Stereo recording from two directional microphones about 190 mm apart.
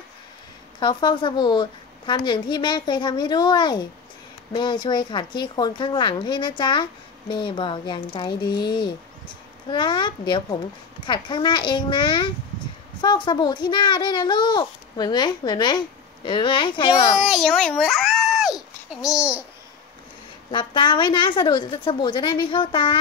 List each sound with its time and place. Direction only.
0.7 s speech: 25° left (ahead or behind)
17.2 s a sound: centre (ahead or behind)
19.1 s babbling: 5° right (ahead or behind)
20.5 s speech: 25° left (ahead or behind)